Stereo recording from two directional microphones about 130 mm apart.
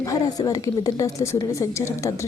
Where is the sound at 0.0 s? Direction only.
25° left (ahead or behind).